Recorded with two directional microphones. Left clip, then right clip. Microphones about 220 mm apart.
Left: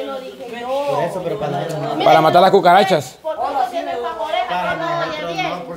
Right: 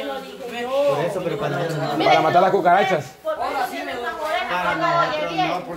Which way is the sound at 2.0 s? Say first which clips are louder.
Left 5 dB; 25° left (ahead or behind).